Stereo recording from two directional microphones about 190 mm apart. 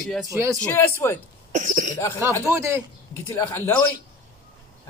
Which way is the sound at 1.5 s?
40° right (ahead or behind).